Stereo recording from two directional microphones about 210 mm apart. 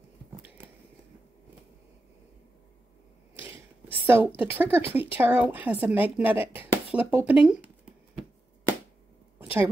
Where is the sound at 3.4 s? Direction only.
10° right (ahead or behind).